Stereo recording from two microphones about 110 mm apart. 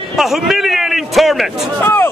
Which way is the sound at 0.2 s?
Centre (ahead or behind).